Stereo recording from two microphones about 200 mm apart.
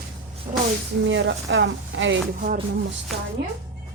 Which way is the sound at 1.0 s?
70° right (ahead or behind).